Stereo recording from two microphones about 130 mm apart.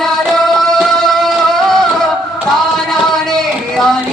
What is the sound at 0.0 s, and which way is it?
Music, centre (ahead or behind).